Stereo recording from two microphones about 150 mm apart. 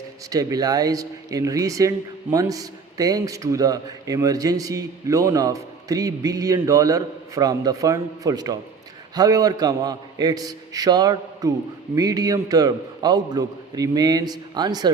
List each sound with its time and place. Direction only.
0.3 s a man's voice: 25° right (ahead or behind)